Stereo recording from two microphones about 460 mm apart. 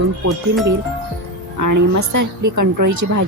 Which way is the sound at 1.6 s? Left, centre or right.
Right.